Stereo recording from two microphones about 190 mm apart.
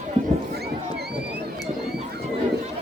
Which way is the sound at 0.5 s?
60° right (ahead or behind).